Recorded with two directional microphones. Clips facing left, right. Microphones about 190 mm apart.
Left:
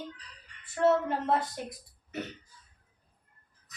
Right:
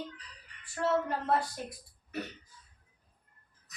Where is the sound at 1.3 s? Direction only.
20° left (ahead or behind).